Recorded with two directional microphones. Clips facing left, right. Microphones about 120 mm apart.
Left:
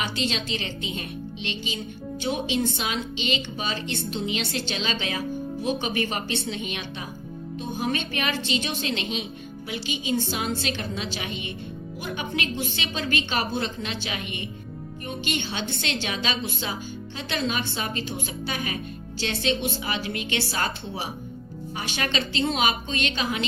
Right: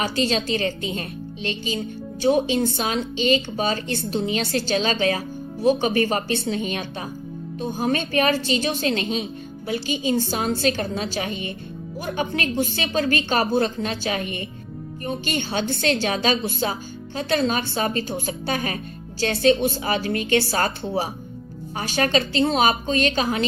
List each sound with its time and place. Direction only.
0.0 s a woman's voice: 40° right (ahead or behind)